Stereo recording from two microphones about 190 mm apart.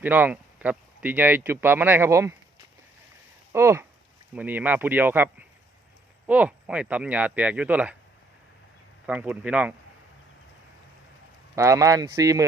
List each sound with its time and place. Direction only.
0.0 s speech: 10° right (ahead or behind)
3.5 s speech: 15° right (ahead or behind)
9.0 s speech: 5° right (ahead or behind)
11.5 s speech: 15° right (ahead or behind)